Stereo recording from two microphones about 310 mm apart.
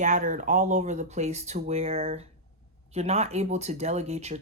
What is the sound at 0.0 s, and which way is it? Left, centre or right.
Speech, right.